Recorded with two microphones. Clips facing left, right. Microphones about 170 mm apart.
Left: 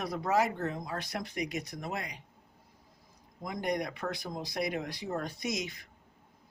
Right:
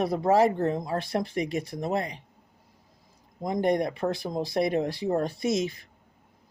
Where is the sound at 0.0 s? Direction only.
25° right (ahead or behind).